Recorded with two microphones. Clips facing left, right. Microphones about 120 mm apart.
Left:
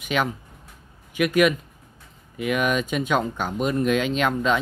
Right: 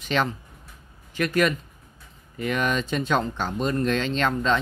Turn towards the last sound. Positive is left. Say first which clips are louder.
# left 1 dB
turn(degrees=10)  # may be behind; listen again after turning